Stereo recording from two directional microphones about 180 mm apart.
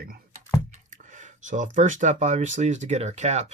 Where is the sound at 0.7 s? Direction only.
45° right (ahead or behind).